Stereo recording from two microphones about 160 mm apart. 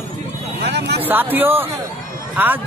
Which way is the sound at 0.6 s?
90° right.